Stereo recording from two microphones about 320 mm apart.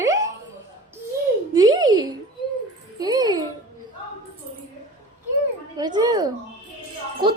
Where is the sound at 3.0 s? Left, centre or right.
Centre.